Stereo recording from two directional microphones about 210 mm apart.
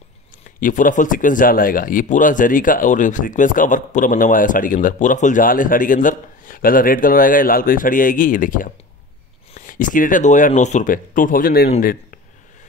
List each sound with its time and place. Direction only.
0.6 s speech: 40° left (ahead or behind)